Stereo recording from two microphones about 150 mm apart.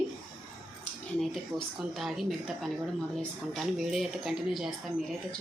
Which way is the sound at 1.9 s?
Centre (ahead or behind).